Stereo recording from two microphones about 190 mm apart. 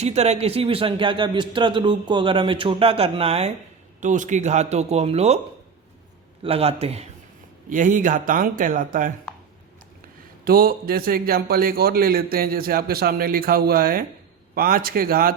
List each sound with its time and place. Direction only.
0.0 s a man's voice: 35° right (ahead or behind)
6.4 s speech: 30° right (ahead or behind)
7.7 s a man's voice: 45° right (ahead or behind)
10.4 s a man's voice: 50° right (ahead or behind)